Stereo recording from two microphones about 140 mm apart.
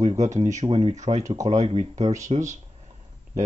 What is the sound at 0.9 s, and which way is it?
Speech, 60° right (ahead or behind).